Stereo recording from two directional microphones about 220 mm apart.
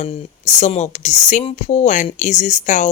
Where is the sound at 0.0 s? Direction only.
30° left (ahead or behind).